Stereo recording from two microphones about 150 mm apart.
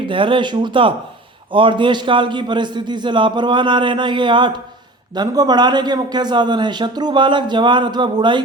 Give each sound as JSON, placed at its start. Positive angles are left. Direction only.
{"t": 0.1, "sound": "a man's voice", "side_deg": -35}